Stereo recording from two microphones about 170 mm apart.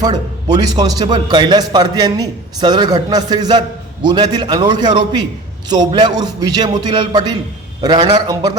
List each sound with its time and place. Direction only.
0.0 s a man's voice: 25° right (ahead or behind)